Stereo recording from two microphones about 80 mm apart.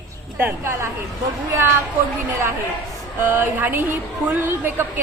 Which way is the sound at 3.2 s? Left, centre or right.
Right.